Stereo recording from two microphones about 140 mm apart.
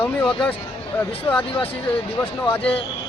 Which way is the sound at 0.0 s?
10° left (ahead or behind).